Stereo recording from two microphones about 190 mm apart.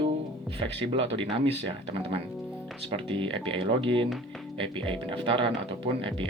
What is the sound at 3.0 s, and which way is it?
Speech, 30° right (ahead or behind).